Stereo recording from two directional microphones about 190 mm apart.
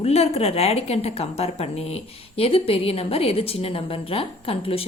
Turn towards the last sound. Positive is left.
turn(degrees=30)  # may be behind; listen again after turning